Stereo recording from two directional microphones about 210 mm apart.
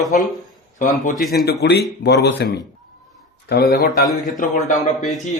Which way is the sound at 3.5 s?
50° left (ahead or behind).